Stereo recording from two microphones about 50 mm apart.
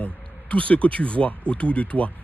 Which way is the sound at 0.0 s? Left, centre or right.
Left.